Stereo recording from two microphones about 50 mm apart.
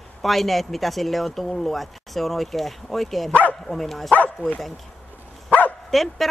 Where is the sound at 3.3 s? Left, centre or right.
Left.